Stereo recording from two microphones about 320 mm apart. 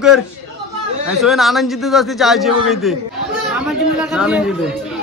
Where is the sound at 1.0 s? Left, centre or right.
Centre.